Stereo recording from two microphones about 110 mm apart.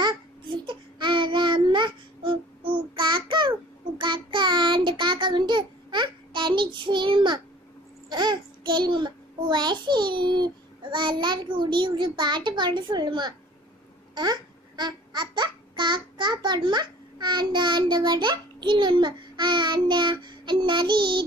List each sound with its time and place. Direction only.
0.0 s child singing: 45° right (ahead or behind)
8.1 s a sound: 45° right (ahead or behind)
14.1 s babbling: 40° right (ahead or behind)